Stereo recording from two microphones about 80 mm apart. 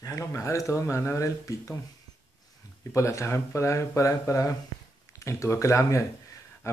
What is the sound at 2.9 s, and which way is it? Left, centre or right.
Speech, left.